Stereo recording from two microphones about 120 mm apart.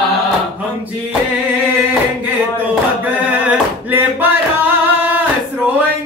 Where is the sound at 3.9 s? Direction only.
15° right (ahead or behind).